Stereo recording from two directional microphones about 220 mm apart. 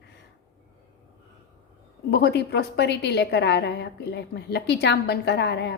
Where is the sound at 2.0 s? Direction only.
50° left (ahead or behind).